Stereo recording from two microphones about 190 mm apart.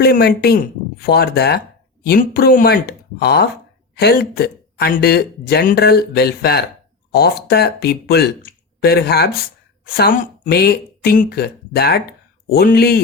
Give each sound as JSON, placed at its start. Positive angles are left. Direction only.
{"t": 0.0, "sound": "speech", "side_deg": 55}